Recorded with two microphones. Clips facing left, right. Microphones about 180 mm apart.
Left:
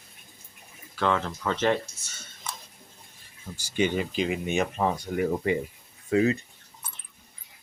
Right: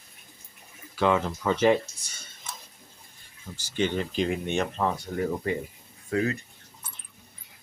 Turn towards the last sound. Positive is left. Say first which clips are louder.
# left 4 dB
turn(degrees=20)  # may be behind; listen again after turning